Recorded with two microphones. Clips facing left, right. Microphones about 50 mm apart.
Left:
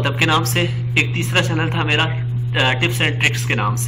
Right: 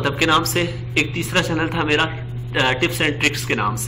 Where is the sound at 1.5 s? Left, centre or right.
Centre.